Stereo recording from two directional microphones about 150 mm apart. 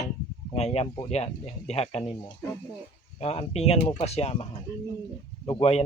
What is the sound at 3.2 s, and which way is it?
Speech, 40° left (ahead or behind).